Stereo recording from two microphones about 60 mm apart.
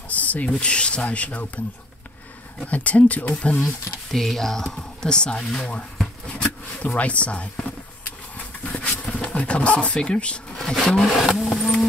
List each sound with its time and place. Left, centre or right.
0.1 s speech: left
2.6 s speech: left
4.1 s speech: centre
6.2 s a sound: left
9.0 s speech: centre
11.1 s vehicle: centre